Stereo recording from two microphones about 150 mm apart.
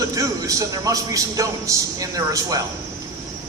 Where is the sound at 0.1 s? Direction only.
25° right (ahead or behind).